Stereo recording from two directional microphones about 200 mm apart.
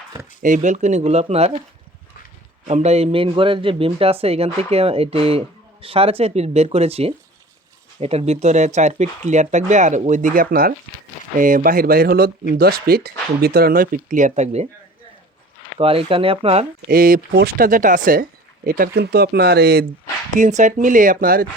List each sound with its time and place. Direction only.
0.4 s speech: 40° right (ahead or behind)
2.6 s speech: 35° right (ahead or behind)
15.8 s speech: 30° right (ahead or behind)
16.9 s speech: 45° right (ahead or behind)
20.3 s speech: 40° right (ahead or behind)